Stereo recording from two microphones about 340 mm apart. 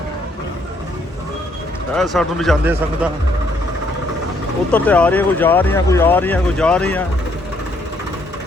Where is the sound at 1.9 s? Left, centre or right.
Centre.